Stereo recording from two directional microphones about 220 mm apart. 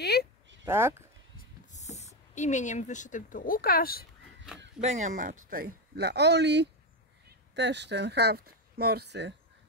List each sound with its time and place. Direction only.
0.0 s a sound: 45° left (ahead or behind)
0.7 s speech: 10° right (ahead or behind)
1.7 s speech: 30° left (ahead or behind)
4.8 s speech: 35° right (ahead or behind); by 9.3 s 50° right (ahead or behind)